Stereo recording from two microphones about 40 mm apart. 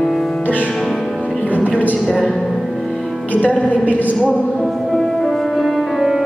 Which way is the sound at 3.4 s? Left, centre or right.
Left.